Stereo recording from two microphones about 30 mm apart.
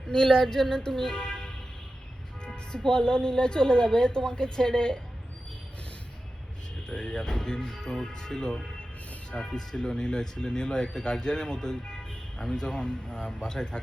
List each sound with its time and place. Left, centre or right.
0.1 s speech: left
2.7 s speech: left
6.8 s speech: left